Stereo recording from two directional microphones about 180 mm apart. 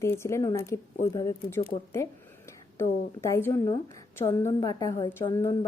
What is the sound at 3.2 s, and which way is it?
A woman's voice, 15° left (ahead or behind).